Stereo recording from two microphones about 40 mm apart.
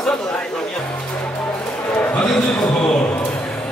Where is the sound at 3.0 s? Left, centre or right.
Left.